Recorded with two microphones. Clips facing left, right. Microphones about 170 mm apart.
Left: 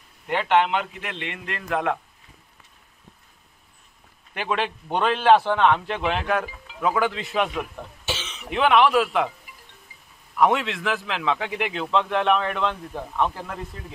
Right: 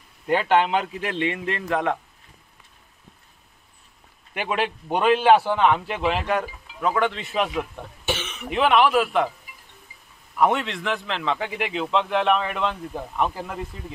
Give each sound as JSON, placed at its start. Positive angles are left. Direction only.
{"t": 0.7, "sound": "a man's voice", "side_deg": -35}
{"t": 1.7, "sound": "a man's voice", "side_deg": 0}
{"t": 4.3, "sound": "a man's voice", "side_deg": -5}
{"t": 8.0, "sound": "cough", "side_deg": -55}
{"t": 8.5, "sound": "a man's voice", "side_deg": 0}
{"t": 10.3, "sound": "a man's voice", "side_deg": 0}